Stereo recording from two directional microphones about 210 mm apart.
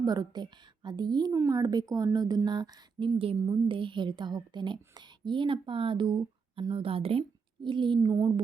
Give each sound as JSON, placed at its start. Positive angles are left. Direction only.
{"t": 0.0, "sound": "a woman's voice", "side_deg": -20}